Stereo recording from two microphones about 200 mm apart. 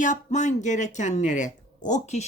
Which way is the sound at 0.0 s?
40° left (ahead or behind).